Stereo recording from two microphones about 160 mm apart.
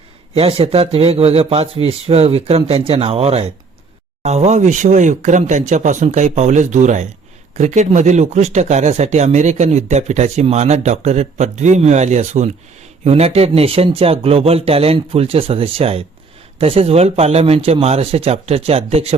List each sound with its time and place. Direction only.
0.3 s speech: 35° right (ahead or behind)